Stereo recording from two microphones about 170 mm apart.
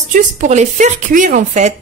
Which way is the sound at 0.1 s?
45° right (ahead or behind).